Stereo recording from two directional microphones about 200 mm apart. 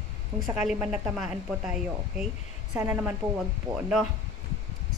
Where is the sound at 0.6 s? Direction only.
5° right (ahead or behind).